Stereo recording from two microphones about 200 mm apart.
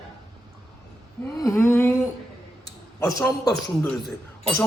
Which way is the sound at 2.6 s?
15° left (ahead or behind).